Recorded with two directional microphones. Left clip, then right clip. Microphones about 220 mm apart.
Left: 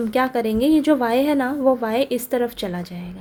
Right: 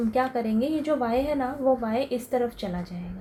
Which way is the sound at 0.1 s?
50° left (ahead or behind).